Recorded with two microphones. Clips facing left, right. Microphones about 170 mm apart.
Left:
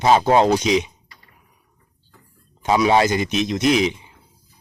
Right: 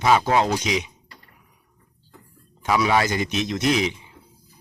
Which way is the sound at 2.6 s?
25° left (ahead or behind).